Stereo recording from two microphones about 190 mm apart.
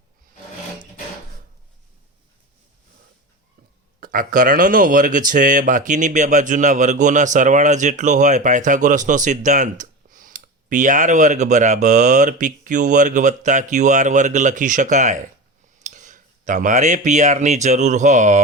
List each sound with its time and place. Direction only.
4.0 s speech: 45° right (ahead or behind)